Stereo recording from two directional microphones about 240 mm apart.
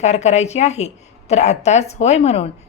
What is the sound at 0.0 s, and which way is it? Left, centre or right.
A woman's voice, left.